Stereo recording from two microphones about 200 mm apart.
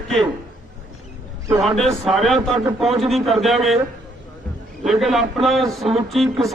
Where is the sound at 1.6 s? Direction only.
Centre (ahead or behind).